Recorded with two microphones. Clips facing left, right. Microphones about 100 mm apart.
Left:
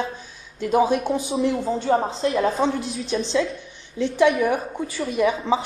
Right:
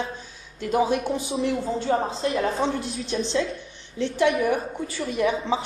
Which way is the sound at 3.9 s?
15° left (ahead or behind).